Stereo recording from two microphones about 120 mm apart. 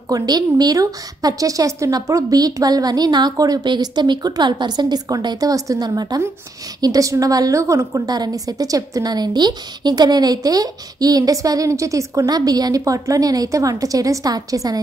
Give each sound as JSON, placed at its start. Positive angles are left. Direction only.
{"t": 0.1, "sound": "a woman's voice", "side_deg": -35}